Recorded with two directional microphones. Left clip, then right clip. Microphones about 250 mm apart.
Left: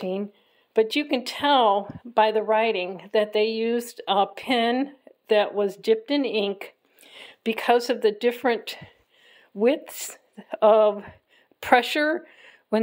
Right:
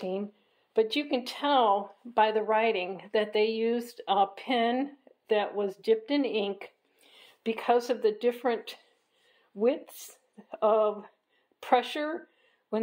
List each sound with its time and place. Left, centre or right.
0.0 s speech: left